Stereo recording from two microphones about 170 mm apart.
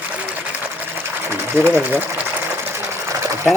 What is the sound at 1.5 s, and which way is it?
Speech, 15° right (ahead or behind).